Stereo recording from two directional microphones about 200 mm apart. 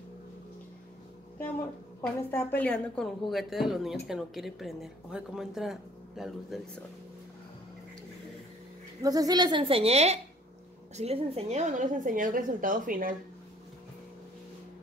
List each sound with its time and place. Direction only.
2.0 s a woman's voice: 10° left (ahead or behind)
9.0 s a woman's voice: 20° right (ahead or behind); by 13.1 s 45° right (ahead or behind)